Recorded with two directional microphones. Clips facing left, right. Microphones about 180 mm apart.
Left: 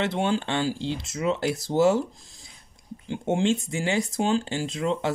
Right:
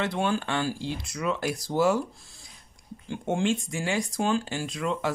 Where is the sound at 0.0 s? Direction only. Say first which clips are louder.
Left 2 dB; 25° left (ahead or behind).